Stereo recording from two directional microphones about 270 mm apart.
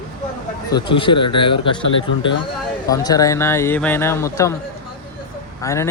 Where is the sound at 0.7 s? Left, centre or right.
Centre.